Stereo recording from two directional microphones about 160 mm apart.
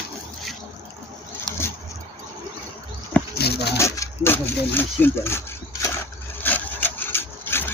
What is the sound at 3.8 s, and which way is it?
Speech, 15° left (ahead or behind).